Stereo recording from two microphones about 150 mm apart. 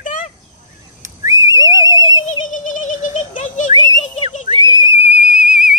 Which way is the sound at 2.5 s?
60° left (ahead or behind).